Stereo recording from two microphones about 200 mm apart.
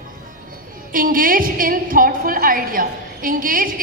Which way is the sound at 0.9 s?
45° right (ahead or behind).